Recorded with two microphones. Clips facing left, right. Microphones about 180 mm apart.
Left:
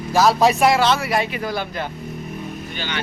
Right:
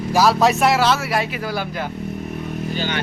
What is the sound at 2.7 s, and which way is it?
Speech, 40° right (ahead or behind).